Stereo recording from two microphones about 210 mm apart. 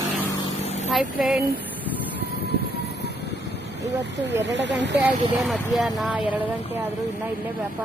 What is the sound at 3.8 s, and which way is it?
Speech, 55° right (ahead or behind).